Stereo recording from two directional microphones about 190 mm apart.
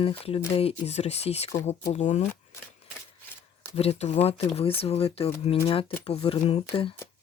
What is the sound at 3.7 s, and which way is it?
Speech, 35° left (ahead or behind).